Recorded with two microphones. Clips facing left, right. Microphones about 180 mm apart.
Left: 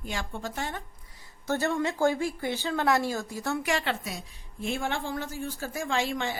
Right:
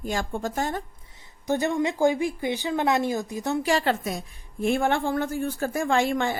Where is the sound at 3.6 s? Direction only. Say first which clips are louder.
Right 6 dB; 40° right (ahead or behind).